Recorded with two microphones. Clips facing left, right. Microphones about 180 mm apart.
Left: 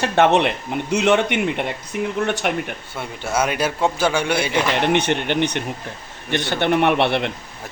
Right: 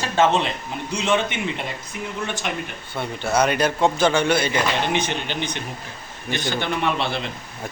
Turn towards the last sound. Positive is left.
turn(degrees=70)  # may be behind; listen again after turning